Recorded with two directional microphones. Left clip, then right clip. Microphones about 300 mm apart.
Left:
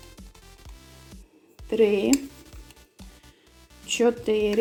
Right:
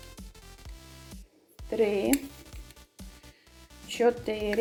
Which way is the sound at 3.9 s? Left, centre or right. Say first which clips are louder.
Left 4 dB; centre.